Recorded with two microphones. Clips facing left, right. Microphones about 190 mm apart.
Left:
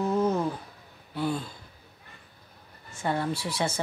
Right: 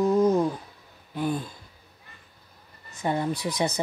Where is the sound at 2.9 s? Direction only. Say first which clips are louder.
Right 2 dB; 15° right (ahead or behind).